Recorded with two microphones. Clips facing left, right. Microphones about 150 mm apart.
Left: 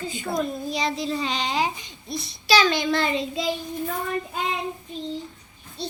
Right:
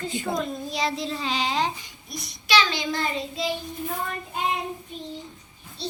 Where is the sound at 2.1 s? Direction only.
30° left (ahead or behind).